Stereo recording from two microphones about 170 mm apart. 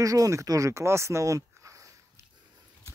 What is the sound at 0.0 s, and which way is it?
Speech, 20° right (ahead or behind).